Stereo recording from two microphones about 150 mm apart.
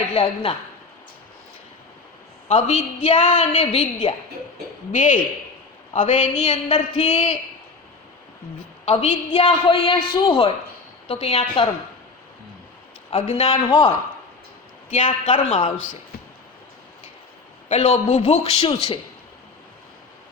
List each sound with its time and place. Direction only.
0.1 s a woman's voice: 40° left (ahead or behind)
2.5 s a woman's voice: 45° left (ahead or behind)
4.9 s a woman's voice: 60° left (ahead or behind)
6.4 s a woman's voice: 35° left (ahead or behind)
8.8 s a woman's voice: 40° left (ahead or behind)
13.1 s a woman's voice: 45° left (ahead or behind)
15.3 s a woman's voice: 45° left (ahead or behind)
17.7 s a woman's voice: 45° left (ahead or behind)